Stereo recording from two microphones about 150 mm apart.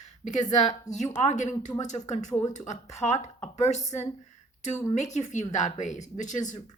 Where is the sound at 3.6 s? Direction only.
50° left (ahead or behind).